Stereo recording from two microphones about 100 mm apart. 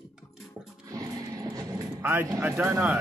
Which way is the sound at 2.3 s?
25° right (ahead or behind).